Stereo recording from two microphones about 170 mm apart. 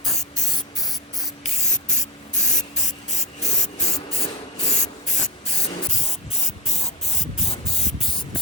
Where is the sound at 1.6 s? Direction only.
45° left (ahead or behind).